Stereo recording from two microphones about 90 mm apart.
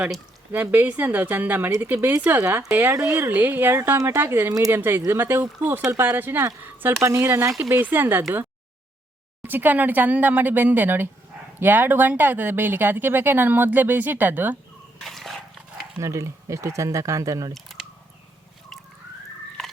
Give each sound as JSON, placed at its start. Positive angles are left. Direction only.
{"t": 0.5, "sound": "speech", "side_deg": -20}
{"t": 9.4, "sound": "speech", "side_deg": -20}
{"t": 15.0, "sound": "dog", "side_deg": 0}
{"t": 16.0, "sound": "speech", "side_deg": -35}
{"t": 19.6, "sound": "biting", "side_deg": 5}